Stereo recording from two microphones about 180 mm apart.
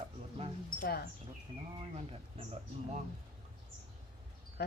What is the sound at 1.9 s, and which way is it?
Speech, 35° right (ahead or behind).